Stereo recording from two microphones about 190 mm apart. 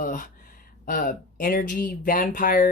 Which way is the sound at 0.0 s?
45° left (ahead or behind).